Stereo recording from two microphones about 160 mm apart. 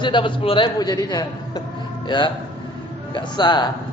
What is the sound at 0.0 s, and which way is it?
A man's voice, 30° left (ahead or behind).